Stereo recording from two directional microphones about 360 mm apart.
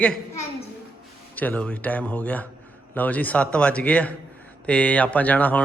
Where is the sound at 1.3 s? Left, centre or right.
Centre.